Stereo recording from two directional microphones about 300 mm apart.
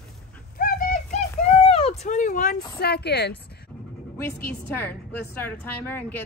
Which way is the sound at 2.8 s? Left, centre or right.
Left.